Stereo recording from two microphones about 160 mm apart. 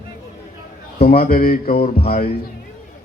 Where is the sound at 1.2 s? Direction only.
65° left (ahead or behind).